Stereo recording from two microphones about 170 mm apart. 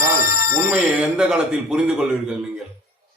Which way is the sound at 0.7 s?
5° right (ahead or behind).